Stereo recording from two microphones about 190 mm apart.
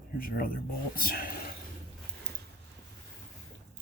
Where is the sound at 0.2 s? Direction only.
50° left (ahead or behind).